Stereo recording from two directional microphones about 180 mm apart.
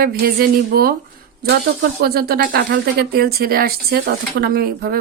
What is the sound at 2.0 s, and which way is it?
Speech, 60° right (ahead or behind).